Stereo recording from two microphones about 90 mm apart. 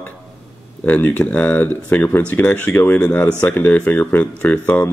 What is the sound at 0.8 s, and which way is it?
Speech, 15° left (ahead or behind).